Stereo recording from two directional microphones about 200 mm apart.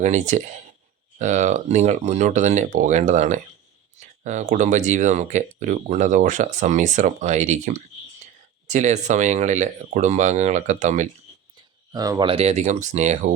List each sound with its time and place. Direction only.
0.0 s speech: 35° right (ahead or behind)
11.9 s speech: 20° right (ahead or behind); by 13.3 s 35° right (ahead or behind)